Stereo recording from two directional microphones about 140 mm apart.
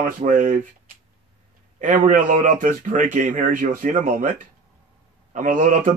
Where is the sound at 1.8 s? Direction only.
65° right (ahead or behind).